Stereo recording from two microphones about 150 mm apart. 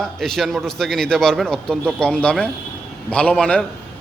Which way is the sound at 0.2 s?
Centre (ahead or behind).